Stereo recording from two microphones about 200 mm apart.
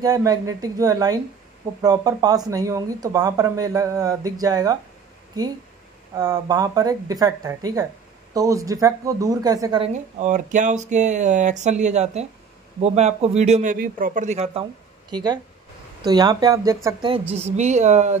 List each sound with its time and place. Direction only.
0.0 s speech: 20° right (ahead or behind)
6.1 s speech: 20° right (ahead or behind)
10.1 s speech: 40° right (ahead or behind); by 17.1 s 15° right (ahead or behind)
17.3 s speech: 30° right (ahead or behind)